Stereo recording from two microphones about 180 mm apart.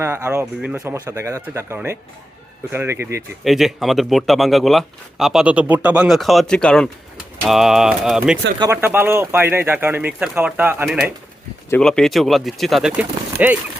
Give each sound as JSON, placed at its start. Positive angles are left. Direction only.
{"t": 0.0, "sound": "speech", "side_deg": -15}
{"t": 3.4, "sound": "speech", "side_deg": 0}
{"t": 8.5, "sound": "speech", "side_deg": -20}
{"t": 8.8, "sound": "speech", "side_deg": -10}
{"t": 11.7, "sound": "speech", "side_deg": 5}